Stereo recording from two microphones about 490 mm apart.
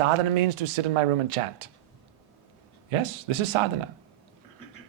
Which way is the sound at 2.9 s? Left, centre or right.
Right.